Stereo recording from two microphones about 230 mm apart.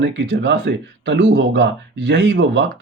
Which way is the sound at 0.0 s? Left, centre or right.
Right.